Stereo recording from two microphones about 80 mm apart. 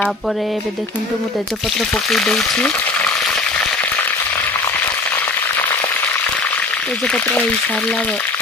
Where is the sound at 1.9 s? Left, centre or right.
Centre.